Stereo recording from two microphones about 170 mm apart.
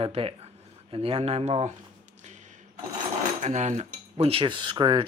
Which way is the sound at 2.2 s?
45° right (ahead or behind).